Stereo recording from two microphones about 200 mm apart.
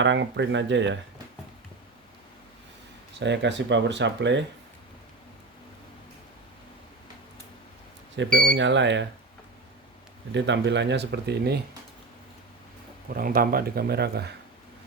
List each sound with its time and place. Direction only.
0.0 s speech: 65° right (ahead or behind)
3.2 s speech: 60° right (ahead or behind)
8.1 s speech: 65° right (ahead or behind)
10.3 s speech: 60° right (ahead or behind)
13.1 s speech: 45° right (ahead or behind)